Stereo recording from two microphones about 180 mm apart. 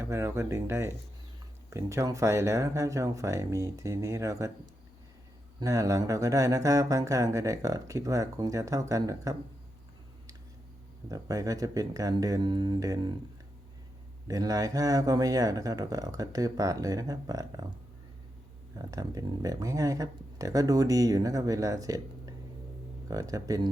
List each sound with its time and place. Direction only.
0.0 s speech: 15° right (ahead or behind)
11.1 s speech: 20° right (ahead or behind)
14.3 s speech: 20° right (ahead or behind)
18.9 s speech: 20° right (ahead or behind)